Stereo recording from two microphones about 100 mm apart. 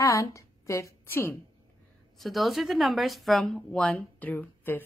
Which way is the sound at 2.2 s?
Centre (ahead or behind).